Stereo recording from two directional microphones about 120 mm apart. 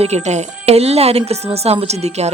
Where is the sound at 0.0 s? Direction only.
70° right (ahead or behind).